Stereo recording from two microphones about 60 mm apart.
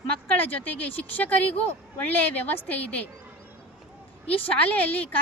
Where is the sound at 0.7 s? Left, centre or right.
Left.